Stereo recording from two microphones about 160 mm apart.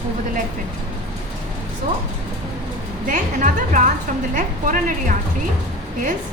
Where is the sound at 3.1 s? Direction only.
55° right (ahead or behind).